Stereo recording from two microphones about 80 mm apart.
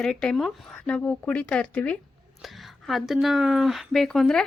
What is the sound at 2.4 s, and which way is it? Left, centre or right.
A woman's voice, centre.